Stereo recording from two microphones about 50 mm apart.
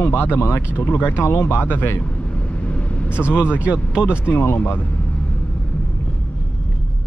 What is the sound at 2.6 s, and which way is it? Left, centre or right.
Vehicle, left.